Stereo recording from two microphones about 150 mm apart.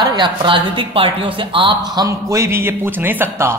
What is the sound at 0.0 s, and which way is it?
A woman's voice, 30° right (ahead or behind).